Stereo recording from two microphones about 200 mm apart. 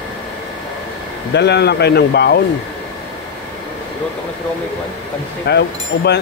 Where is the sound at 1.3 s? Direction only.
55° left (ahead or behind).